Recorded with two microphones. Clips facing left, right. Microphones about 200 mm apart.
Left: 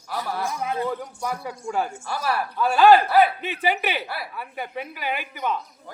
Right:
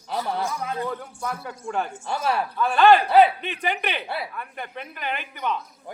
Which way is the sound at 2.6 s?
5° left (ahead or behind).